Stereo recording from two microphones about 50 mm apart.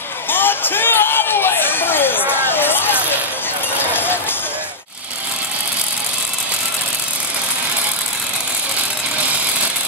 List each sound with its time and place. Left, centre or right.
0.3 s a sound: left
2.5 s vehicle: left
3.8 s run: left